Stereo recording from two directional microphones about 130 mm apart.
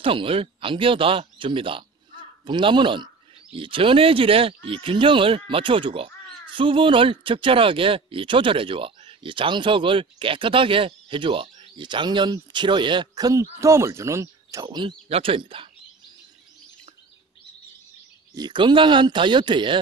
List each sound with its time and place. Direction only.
0.0 s speech: 45° right (ahead or behind)
15.0 s speech: 45° right (ahead or behind)
18.3 s speech: 35° right (ahead or behind)